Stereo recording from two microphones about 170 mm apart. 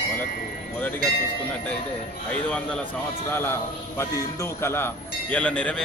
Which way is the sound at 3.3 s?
15° left (ahead or behind).